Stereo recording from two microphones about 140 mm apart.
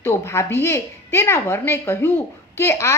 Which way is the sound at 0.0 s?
20° left (ahead or behind).